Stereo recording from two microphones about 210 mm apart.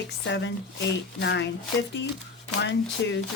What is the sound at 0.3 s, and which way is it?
Speech, 55° left (ahead or behind).